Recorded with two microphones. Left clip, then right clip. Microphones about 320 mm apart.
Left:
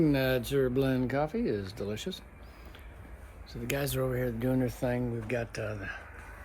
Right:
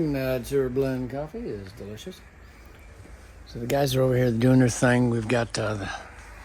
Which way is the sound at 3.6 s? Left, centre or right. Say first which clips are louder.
Right 9 dB; centre.